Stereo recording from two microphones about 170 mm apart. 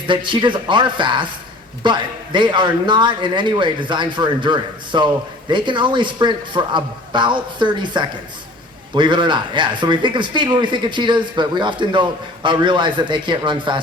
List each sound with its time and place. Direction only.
0.1 s a man's voice: 30° right (ahead or behind)